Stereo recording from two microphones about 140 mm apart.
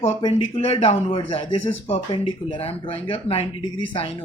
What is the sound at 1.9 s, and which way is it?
Speech, 35° left (ahead or behind).